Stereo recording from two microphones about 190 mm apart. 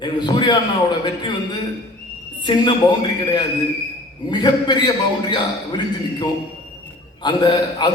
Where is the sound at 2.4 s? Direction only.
25° left (ahead or behind).